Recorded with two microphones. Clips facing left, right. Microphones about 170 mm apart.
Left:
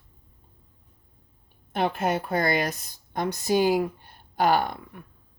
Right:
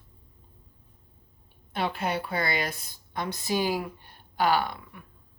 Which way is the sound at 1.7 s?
50° left (ahead or behind).